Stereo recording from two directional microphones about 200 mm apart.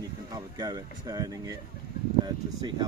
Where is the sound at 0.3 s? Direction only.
20° right (ahead or behind).